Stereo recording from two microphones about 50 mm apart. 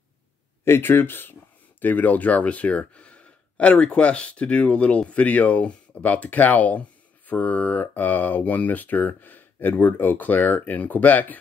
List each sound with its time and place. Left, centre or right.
0.7 s speech: left
1.8 s speech: left